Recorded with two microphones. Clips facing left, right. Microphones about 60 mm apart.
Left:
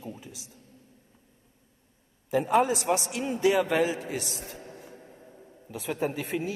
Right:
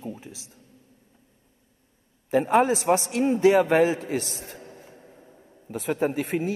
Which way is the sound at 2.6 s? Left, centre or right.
Right.